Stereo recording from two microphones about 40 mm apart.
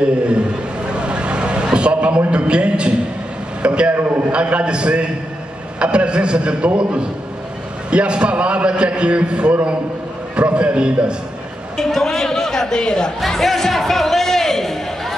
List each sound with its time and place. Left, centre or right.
0.8 s a sound: right
3.6 s a man's voice: right
11.7 s a woman's voice: centre
13.4 s speech: centre